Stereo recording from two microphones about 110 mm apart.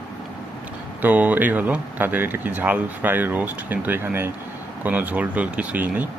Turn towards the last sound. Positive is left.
turn(degrees=-15)  # may be behind; listen again after turning